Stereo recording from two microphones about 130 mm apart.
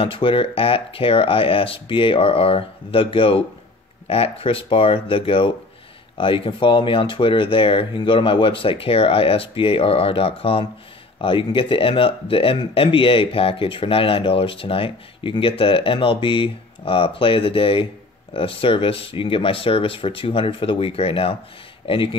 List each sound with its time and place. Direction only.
0.0 s speech: 40° left (ahead or behind)